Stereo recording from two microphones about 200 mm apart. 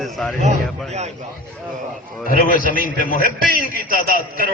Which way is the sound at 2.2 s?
40° left (ahead or behind).